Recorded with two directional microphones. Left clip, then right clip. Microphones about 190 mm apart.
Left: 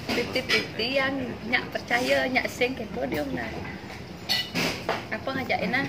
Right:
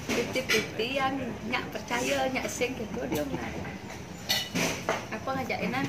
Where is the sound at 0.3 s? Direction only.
15° left (ahead or behind).